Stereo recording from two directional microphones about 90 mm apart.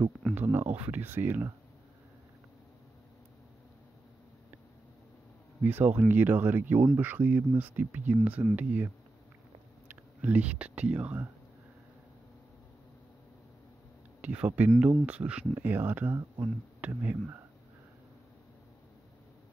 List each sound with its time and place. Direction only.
0.3 s speech: 25° right (ahead or behind)
5.6 s speech: 20° right (ahead or behind)
14.2 s speech: 15° right (ahead or behind)